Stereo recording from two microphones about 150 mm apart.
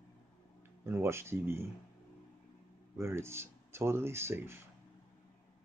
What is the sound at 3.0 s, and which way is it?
Speech, 15° right (ahead or behind).